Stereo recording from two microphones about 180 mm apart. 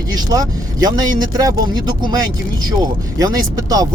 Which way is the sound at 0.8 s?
25° right (ahead or behind).